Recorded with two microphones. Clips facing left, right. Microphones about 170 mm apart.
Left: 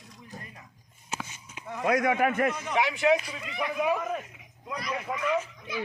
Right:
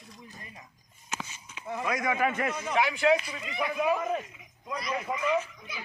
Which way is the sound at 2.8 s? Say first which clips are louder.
Even; 15° left (ahead or behind).